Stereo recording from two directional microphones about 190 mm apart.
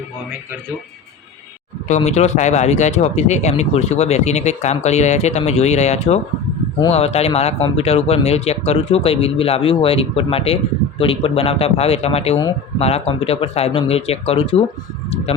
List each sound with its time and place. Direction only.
1.9 s speech: 35° left (ahead or behind)